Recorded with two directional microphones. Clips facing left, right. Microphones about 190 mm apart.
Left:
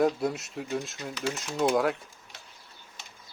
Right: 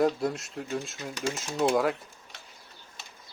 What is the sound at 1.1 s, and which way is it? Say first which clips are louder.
Speech: even; 45° right (ahead or behind).